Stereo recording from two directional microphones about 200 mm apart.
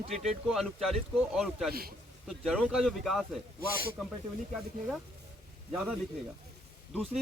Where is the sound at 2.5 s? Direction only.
Centre (ahead or behind).